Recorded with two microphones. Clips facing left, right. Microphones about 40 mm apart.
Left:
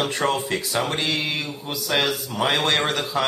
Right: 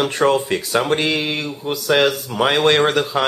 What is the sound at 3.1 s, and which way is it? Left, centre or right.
Speech, right.